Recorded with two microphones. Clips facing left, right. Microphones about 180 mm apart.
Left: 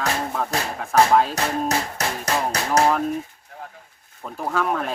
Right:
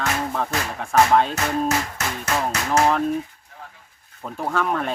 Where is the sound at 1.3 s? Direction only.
35° left (ahead or behind).